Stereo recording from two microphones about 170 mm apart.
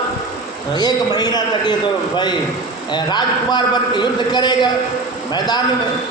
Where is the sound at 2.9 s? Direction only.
25° left (ahead or behind).